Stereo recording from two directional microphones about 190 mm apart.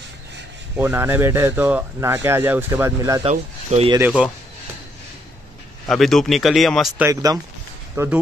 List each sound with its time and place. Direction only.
0.7 s speech: 10° right (ahead or behind)
3.3 s speech: 35° right (ahead or behind)
4.0 s speech: 5° right (ahead or behind)
5.9 s speech: centre (ahead or behind)
7.1 s speech: 15° right (ahead or behind)